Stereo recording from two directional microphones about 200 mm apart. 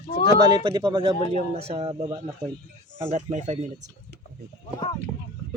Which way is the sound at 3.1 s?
35° right (ahead or behind).